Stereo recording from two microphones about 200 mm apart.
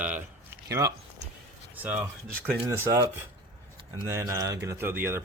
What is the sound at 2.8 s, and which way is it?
Speech, 15° right (ahead or behind).